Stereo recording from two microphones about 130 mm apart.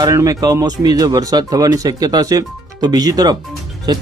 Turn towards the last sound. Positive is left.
turn(degrees=-35)  # may be behind; listen again after turning